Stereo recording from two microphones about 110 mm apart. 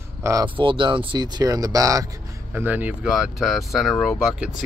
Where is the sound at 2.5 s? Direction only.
15° right (ahead or behind).